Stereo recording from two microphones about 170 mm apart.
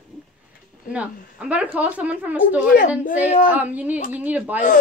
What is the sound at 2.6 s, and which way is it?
Speech, 55° left (ahead or behind).